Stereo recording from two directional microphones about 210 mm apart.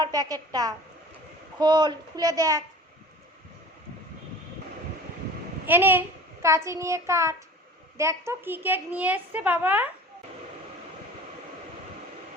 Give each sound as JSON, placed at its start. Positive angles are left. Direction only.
{"t": 0.0, "sound": "a woman's voice", "side_deg": -15}
{"t": 5.6, "sound": "a child's voice", "side_deg": -10}